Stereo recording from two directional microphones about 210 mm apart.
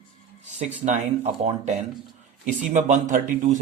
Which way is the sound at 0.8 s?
35° right (ahead or behind).